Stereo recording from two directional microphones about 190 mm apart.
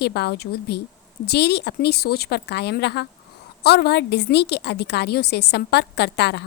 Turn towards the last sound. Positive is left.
turn(degrees=60)  # may be behind; listen again after turning